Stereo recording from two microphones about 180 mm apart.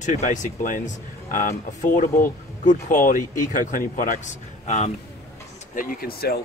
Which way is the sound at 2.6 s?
45° left (ahead or behind).